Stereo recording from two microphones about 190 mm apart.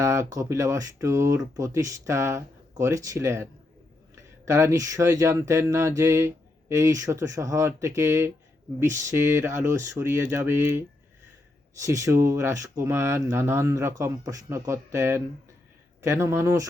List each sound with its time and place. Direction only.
0.0 s speech: 15° right (ahead or behind)